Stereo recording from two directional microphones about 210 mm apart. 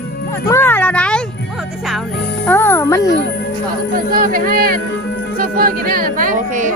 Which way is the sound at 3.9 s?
40° right (ahead or behind).